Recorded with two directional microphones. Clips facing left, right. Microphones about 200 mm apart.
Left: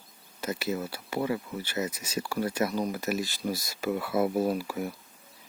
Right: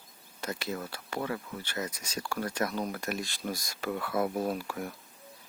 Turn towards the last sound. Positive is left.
turn(degrees=5)  # may be behind; listen again after turning